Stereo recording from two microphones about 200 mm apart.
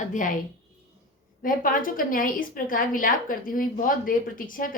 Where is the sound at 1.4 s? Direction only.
45° left (ahead or behind).